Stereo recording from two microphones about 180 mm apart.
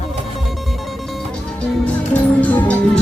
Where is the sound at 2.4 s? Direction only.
10° left (ahead or behind).